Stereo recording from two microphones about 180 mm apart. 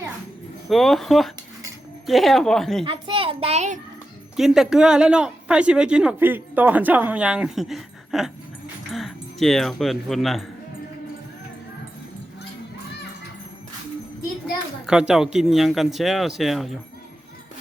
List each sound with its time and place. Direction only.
0.7 s speech: centre (ahead or behind)
2.8 s a child's voice: 30° right (ahead or behind)
4.4 s speech: centre (ahead or behind)
14.8 s speech: 5° right (ahead or behind)